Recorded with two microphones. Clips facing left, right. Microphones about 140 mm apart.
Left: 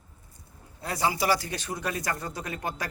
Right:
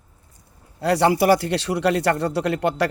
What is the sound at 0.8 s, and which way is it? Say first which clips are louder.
Speech: right 10 dB; 70° right (ahead or behind).